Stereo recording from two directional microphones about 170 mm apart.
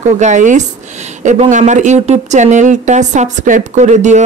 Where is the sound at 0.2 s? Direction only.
45° right (ahead or behind).